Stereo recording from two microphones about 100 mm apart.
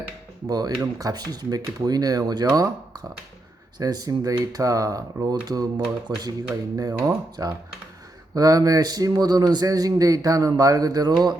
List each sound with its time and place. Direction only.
0.4 s speech: 40° right (ahead or behind)
3.8 s speech: 40° right (ahead or behind)